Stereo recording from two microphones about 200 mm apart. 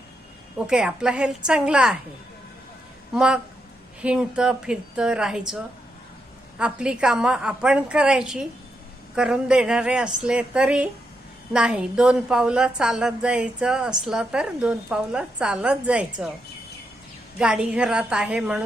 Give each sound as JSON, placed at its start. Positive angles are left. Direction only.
{"t": 0.7, "sound": "a woman's voice", "side_deg": -5}
{"t": 3.1, "sound": "a woman's voice", "side_deg": -5}
{"t": 6.6, "sound": "a woman's voice", "side_deg": -5}
{"t": 17.3, "sound": "a woman's voice", "side_deg": -5}